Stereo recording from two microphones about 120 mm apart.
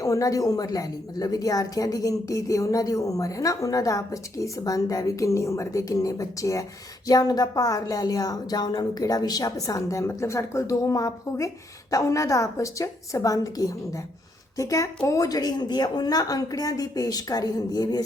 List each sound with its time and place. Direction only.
0.0 s a woman's voice: 25° left (ahead or behind)